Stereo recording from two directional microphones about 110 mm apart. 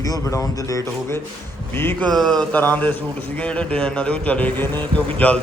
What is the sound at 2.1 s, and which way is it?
A man's voice, centre (ahead or behind).